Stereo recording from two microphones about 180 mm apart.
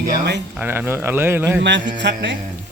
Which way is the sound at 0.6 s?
10° right (ahead or behind).